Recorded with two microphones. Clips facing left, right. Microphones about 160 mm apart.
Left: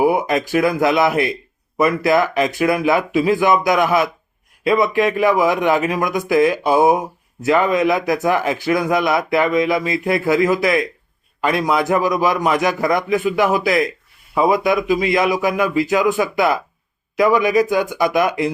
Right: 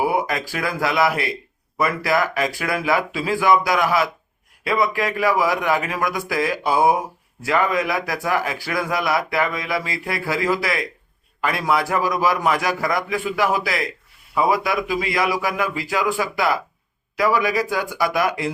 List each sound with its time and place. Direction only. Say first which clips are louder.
0.0 s speech: left 5 dB; 20° left (ahead or behind)